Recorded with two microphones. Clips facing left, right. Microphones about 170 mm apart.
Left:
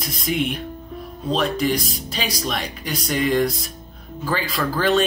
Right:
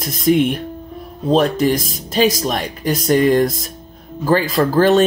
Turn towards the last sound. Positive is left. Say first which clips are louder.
# right 7 dB
turn(degrees=-45)  # may be behind; listen again after turning